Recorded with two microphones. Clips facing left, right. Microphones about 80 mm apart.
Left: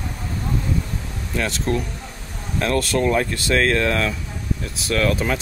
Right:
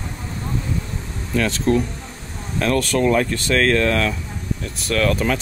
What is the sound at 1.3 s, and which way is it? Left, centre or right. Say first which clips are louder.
Speech: right 4 dB; centre.